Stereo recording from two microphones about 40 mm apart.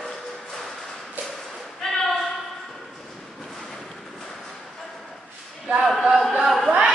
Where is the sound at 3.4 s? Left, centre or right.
Centre.